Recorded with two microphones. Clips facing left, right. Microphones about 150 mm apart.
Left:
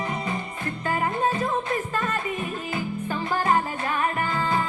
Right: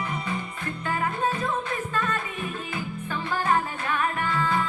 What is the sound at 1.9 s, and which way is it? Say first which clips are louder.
Music: right 2 dB; 40° left (ahead or behind).